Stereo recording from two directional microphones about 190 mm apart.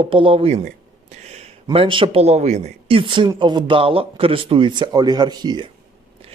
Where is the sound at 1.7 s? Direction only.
25° right (ahead or behind).